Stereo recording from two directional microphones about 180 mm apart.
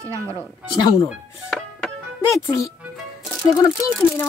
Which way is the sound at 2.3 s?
15° left (ahead or behind).